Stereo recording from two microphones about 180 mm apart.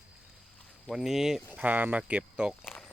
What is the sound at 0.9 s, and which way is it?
Speech, centre (ahead or behind).